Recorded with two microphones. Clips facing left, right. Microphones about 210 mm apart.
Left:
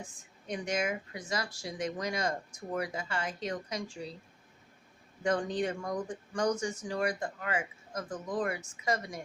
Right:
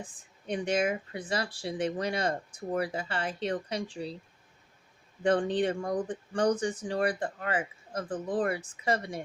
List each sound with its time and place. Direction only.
0.2 s speech: 30° right (ahead or behind)
5.2 s speech: 30° right (ahead or behind)